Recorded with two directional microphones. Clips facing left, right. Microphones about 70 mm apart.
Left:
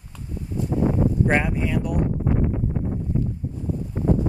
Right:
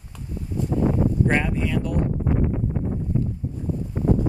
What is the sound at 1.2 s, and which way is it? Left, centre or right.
Speech, centre.